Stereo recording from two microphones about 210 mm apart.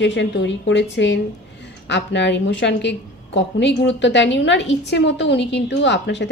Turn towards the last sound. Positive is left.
turn(degrees=55)  # may be behind; listen again after turning